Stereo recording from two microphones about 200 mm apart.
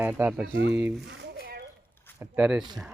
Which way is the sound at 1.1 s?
50° right (ahead or behind).